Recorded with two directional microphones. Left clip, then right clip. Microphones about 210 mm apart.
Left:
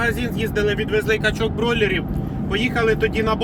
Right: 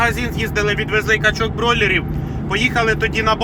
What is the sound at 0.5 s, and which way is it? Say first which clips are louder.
Speech: right 2 dB; 15° left (ahead or behind).